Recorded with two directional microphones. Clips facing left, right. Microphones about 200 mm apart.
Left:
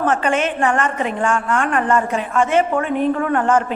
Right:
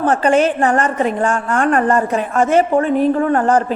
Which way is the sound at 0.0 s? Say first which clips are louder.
Right 5 dB; 35° right (ahead or behind).